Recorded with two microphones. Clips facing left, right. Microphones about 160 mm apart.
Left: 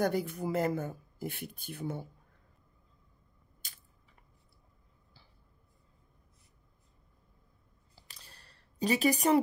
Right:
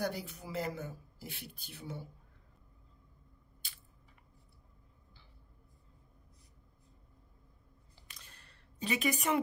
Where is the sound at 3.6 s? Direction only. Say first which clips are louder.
Left 1 dB; 45° left (ahead or behind).